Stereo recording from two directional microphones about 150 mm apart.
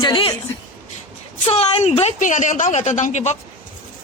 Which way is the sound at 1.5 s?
40° left (ahead or behind).